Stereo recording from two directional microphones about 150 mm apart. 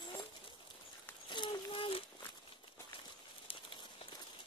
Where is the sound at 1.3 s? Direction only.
30° left (ahead or behind).